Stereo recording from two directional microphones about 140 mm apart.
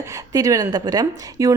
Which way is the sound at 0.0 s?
25° right (ahead or behind).